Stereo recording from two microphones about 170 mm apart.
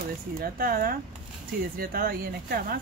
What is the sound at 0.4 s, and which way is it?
Stir, 60° right (ahead or behind).